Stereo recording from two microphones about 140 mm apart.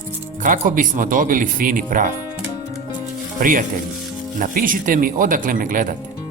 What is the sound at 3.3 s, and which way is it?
Speech, 80° right.